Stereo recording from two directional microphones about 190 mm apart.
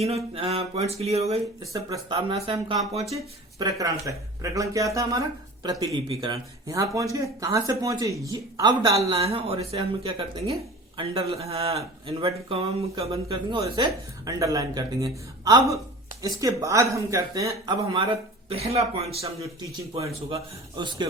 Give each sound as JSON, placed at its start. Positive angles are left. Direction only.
{"t": 0.3, "sound": "speech", "side_deg": -30}
{"t": 1.7, "sound": "speech", "side_deg": -20}